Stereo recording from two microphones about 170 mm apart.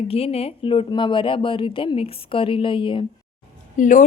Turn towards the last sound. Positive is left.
turn(degrees=50)  # may be behind; listen again after turning